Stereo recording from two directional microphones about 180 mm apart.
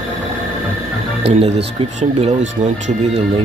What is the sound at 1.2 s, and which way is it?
Speech, 35° right (ahead or behind).